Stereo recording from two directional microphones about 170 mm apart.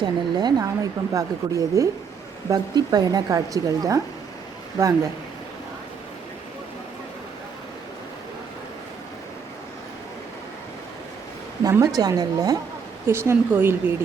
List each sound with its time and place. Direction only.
0.0 s speech: 25° right (ahead or behind)
11.6 s speech: 20° right (ahead or behind)